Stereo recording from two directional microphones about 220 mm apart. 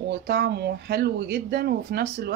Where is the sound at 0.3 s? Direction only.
50° right (ahead or behind).